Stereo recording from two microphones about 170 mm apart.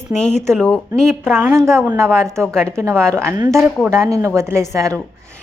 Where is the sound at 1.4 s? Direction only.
15° right (ahead or behind).